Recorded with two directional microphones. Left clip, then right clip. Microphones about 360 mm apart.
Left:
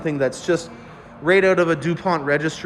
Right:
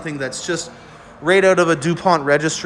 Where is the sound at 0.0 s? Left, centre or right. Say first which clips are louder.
Left 3 dB; centre.